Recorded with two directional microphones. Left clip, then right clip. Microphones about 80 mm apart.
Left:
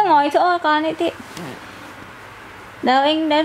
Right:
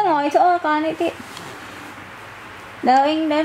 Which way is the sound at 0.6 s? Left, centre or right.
Left.